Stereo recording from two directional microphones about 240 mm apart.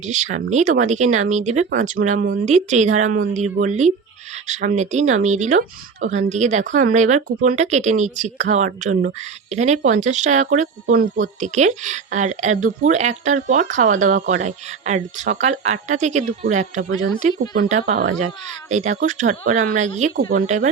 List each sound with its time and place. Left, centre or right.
0.0 s speech: right